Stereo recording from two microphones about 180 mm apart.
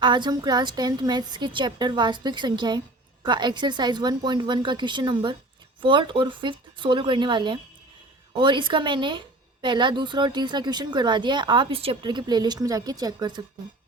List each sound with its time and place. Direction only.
0.0 s a woman's voice: 25° right (ahead or behind)